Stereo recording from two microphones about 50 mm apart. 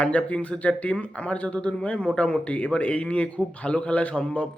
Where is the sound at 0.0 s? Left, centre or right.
Left.